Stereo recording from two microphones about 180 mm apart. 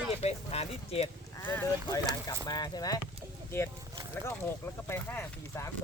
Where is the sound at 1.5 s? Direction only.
15° left (ahead or behind).